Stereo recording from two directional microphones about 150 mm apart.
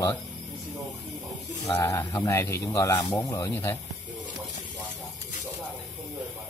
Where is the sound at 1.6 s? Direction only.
20° left (ahead or behind).